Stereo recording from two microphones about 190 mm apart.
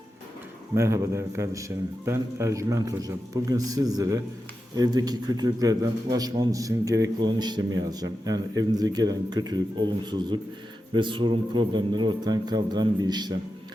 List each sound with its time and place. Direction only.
0.8 s a man's voice: 15° right (ahead or behind)